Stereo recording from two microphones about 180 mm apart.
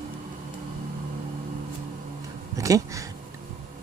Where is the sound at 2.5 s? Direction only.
20° right (ahead or behind).